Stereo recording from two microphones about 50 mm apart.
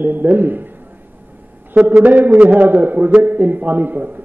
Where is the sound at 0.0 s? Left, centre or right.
Right.